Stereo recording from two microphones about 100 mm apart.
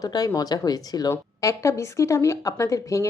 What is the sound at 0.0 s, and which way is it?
Speech, 40° left (ahead or behind).